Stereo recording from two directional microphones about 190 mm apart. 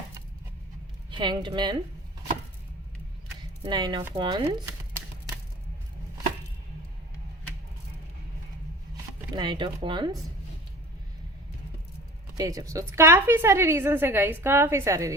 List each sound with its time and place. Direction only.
1.1 s speech: 25° right (ahead or behind)
3.6 s speech: 20° right (ahead or behind)
9.3 s speech: 25° right (ahead or behind)
12.4 s a woman's voice: 15° right (ahead or behind)